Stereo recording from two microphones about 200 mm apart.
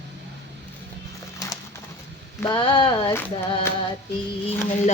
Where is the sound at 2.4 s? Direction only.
25° left (ahead or behind).